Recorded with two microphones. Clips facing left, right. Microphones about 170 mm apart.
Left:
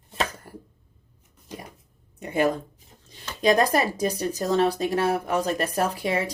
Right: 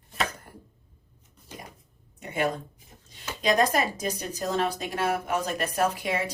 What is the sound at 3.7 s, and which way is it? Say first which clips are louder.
Speech: left 4 dB; 30° left (ahead or behind).